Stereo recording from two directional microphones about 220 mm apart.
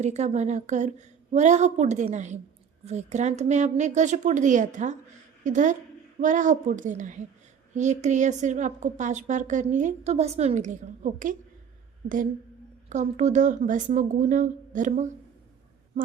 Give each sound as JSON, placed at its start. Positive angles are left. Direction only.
{"t": 0.0, "sound": "a woman's voice", "side_deg": -30}